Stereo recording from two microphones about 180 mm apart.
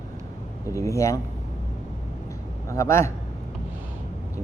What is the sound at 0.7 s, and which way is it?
Speech, 15° left (ahead or behind).